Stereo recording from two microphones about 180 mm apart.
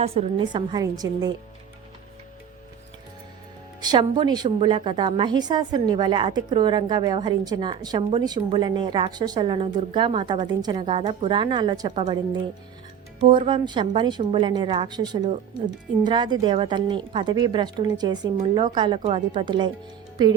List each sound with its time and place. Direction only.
0.0 s a woman's voice: 35° right (ahead or behind)
3.8 s a woman's voice: 25° right (ahead or behind)